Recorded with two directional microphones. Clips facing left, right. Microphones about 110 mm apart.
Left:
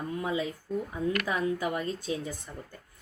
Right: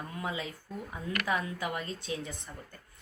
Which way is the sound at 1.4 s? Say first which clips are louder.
Left 6 dB; 30° left (ahead or behind).